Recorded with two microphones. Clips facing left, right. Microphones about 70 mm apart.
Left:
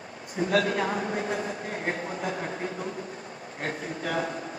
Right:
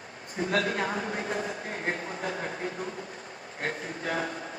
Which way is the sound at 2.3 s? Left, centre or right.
Left.